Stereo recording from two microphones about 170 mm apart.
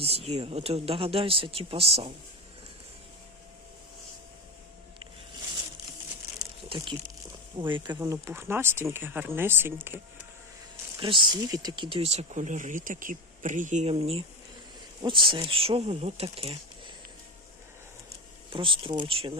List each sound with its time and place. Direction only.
0.0 s speech: 35° right (ahead or behind)
6.7 s speech: 30° right (ahead or behind)
7.9 s speech: 15° right (ahead or behind)
11.0 s speech: 30° right (ahead or behind)
18.5 s speech: 30° right (ahead or behind)